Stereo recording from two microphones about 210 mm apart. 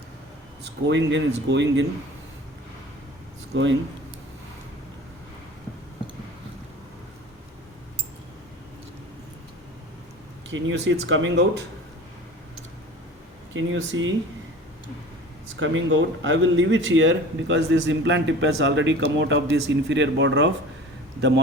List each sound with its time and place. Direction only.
0.6 s speech: 55° right (ahead or behind)
3.5 s speech: 60° right (ahead or behind)
10.5 s speech: 60° right (ahead or behind)
13.5 s speech: 65° right (ahead or behind)
15.5 s speech: 65° right (ahead or behind)